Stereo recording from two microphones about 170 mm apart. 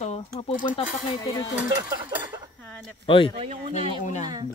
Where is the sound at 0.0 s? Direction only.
40° left (ahead or behind).